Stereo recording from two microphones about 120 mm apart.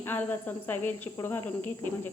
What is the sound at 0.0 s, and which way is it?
A woman's voice, 15° left (ahead or behind).